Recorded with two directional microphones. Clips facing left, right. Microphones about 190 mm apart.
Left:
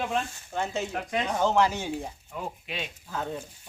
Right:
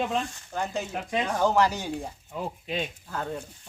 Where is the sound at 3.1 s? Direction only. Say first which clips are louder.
Even; centre (ahead or behind).